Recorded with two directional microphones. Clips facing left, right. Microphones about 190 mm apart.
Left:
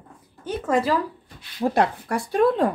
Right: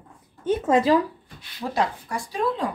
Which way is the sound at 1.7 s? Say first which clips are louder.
Left 1 dB; 60° left (ahead or behind).